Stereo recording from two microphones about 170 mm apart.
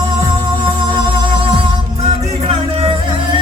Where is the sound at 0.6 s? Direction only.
30° right (ahead or behind).